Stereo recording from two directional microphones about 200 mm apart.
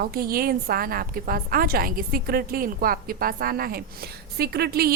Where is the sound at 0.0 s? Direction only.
50° right (ahead or behind).